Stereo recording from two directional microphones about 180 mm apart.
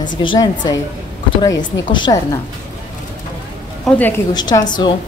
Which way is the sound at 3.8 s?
10° left (ahead or behind).